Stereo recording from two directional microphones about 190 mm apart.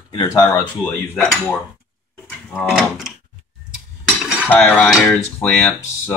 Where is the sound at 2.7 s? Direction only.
Centre (ahead or behind).